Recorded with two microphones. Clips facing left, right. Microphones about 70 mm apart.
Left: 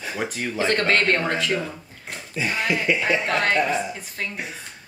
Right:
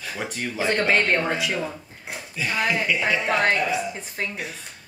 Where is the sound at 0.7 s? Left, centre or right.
Centre.